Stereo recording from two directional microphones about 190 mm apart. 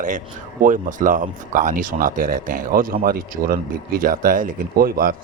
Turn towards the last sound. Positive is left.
turn(degrees=-50)  # may be behind; listen again after turning